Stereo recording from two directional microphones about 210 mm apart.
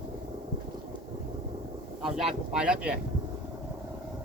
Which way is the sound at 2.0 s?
Centre (ahead or behind).